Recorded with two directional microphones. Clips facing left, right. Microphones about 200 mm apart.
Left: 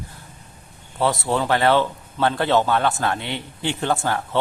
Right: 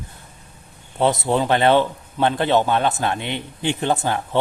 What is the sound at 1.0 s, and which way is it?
A man's voice, 20° right (ahead or behind).